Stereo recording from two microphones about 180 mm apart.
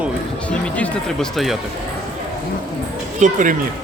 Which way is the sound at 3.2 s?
45° right (ahead or behind).